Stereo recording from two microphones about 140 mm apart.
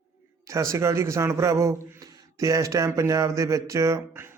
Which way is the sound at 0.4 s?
20° right (ahead or behind).